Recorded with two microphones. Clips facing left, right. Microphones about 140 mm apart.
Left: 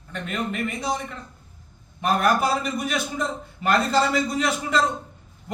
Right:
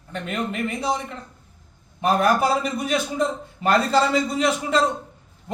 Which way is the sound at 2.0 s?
30° right (ahead or behind).